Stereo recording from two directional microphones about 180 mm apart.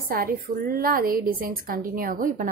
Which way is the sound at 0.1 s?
55° right (ahead or behind).